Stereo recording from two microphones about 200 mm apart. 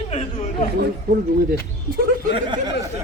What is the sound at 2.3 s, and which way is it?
Speech, 25° right (ahead or behind).